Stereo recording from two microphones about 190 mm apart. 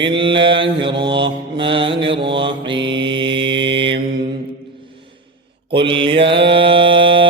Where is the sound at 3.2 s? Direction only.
75° right (ahead or behind).